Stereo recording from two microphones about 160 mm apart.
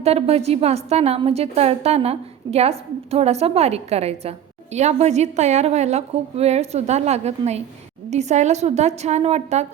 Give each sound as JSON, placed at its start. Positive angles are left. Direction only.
{"t": 0.0, "sound": "a woman's voice", "side_deg": -40}